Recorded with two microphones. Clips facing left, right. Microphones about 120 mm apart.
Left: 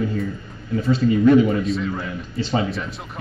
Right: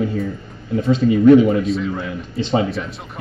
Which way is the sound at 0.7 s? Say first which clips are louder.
Right 3 dB; 25° right (ahead or behind).